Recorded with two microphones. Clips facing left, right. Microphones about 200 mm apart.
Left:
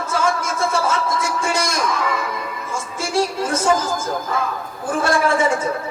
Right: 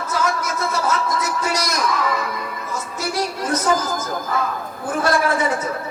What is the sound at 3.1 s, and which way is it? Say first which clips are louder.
Speech: left 4 dB; 25° left (ahead or behind).